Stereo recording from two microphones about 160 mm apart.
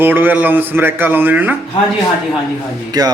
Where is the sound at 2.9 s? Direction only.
25° right (ahead or behind).